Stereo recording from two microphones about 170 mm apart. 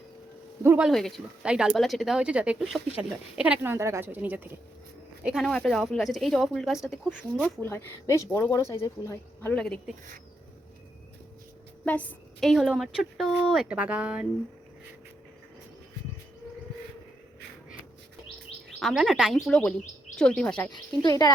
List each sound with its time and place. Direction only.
0.6 s speech: 15° right (ahead or behind)
0.9 s a woman's voice: centre (ahead or behind)
7.4 s speech: 15° left (ahead or behind)
11.9 s a woman's voice: 5° left (ahead or behind)
18.8 s a woman's voice: centre (ahead or behind)
20.7 s a woman's voice: 25° left (ahead or behind)